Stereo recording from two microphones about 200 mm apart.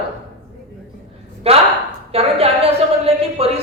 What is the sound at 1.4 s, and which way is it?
A woman's voice, 30° right (ahead or behind).